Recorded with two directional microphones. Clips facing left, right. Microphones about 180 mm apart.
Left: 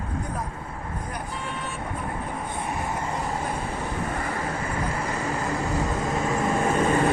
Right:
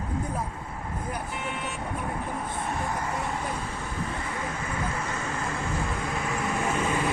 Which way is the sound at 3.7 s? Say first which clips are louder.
Left 4 dB; 60° left (ahead or behind).